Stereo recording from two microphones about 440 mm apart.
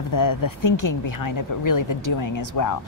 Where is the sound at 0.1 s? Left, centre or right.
Left.